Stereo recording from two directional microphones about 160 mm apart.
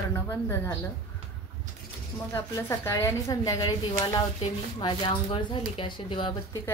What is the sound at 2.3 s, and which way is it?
A woman's voice, 15° left (ahead or behind).